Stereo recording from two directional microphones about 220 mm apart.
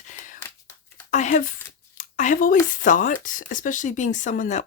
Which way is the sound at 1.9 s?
35° left (ahead or behind).